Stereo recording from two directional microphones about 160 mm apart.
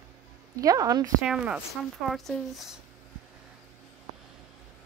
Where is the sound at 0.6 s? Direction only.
20° right (ahead or behind).